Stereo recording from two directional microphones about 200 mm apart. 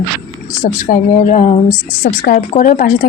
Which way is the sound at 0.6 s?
35° left (ahead or behind).